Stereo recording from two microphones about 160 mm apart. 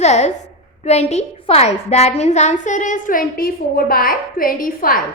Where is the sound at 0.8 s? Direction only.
45° left (ahead or behind).